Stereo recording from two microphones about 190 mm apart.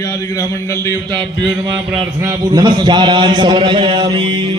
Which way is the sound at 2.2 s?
20° right (ahead or behind).